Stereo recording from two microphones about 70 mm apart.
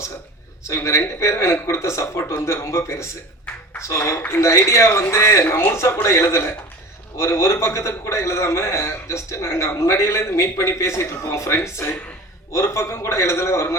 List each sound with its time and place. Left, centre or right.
0.9 s a man's voice: left